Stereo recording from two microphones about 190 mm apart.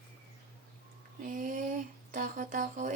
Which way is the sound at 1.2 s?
45° right (ahead or behind).